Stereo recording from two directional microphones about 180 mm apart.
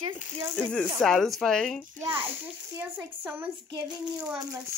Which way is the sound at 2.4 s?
15° right (ahead or behind).